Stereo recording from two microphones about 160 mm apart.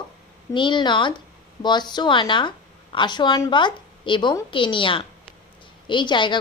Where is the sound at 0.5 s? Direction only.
30° left (ahead or behind).